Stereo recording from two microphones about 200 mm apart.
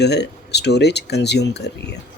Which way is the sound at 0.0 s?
55° left (ahead or behind).